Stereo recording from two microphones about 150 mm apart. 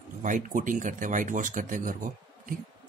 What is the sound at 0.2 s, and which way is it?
Speech, 60° right (ahead or behind).